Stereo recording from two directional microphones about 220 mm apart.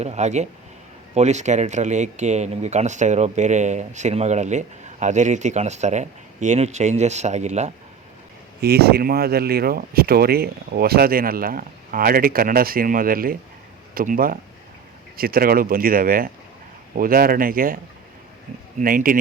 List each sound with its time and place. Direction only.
0.0 s speech: 30° right (ahead or behind)
8.6 s speech: 45° right (ahead or behind)
18.8 s speech: 40° right (ahead or behind)